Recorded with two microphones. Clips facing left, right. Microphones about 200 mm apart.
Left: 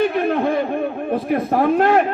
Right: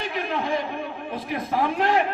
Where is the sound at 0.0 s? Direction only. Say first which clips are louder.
Left 10 dB; 55° left (ahead or behind).